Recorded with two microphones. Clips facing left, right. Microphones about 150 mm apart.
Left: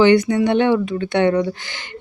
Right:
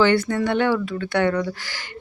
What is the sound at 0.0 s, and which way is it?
Speech, 20° left (ahead or behind).